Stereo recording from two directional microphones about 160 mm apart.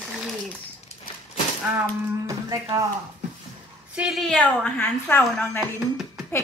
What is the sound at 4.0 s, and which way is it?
Speech, centre (ahead or behind).